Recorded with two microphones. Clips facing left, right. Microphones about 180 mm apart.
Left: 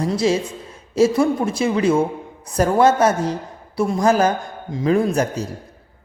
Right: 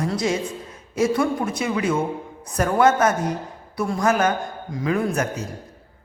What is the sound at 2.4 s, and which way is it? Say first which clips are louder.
A woman's voice: left 3 dB; 30° left (ahead or behind).